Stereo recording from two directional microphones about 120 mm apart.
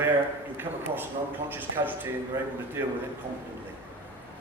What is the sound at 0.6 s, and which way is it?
A man's voice, 15° right (ahead or behind).